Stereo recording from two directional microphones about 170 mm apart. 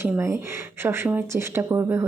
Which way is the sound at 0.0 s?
15° right (ahead or behind).